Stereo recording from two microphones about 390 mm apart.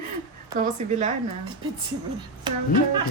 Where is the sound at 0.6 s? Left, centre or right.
Centre.